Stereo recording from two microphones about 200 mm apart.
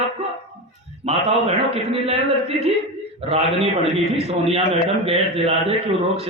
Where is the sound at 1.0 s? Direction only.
30° right (ahead or behind).